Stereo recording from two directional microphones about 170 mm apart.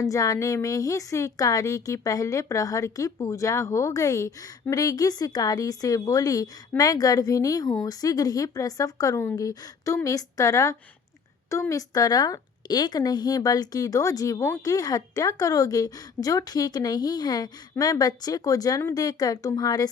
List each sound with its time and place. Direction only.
0.0 s speech: 20° left (ahead or behind)